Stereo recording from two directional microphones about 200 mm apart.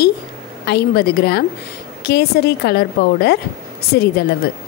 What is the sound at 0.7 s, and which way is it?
A woman's voice, 50° left (ahead or behind).